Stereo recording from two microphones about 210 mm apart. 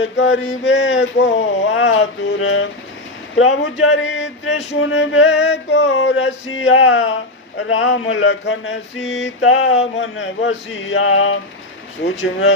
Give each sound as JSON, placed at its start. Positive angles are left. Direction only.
{"t": 0.0, "sound": "mantra", "side_deg": 60}